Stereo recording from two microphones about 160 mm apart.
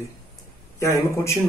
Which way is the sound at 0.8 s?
20° left (ahead or behind).